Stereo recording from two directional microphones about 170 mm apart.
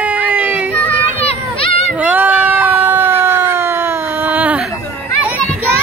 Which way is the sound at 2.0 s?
10° right (ahead or behind).